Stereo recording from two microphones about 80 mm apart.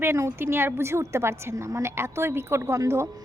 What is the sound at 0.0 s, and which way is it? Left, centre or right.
A woman's voice, right.